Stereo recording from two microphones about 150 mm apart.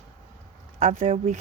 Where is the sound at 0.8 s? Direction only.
55° right (ahead or behind).